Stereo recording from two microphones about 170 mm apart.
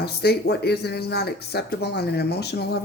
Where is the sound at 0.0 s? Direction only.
70° left (ahead or behind).